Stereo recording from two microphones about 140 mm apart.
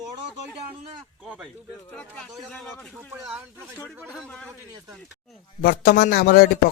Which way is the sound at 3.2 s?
10° right (ahead or behind).